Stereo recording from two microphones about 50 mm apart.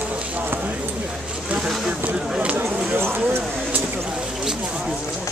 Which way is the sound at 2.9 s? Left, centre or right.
Right.